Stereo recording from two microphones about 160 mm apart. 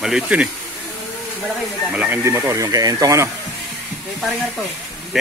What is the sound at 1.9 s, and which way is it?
Speech, 10° right (ahead or behind).